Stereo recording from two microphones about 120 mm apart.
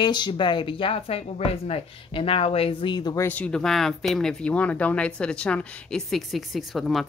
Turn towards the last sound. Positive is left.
turn(degrees=0)  # may be behind; listen again after turning